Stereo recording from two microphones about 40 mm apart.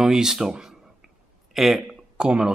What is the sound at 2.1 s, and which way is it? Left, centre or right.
Speech, right.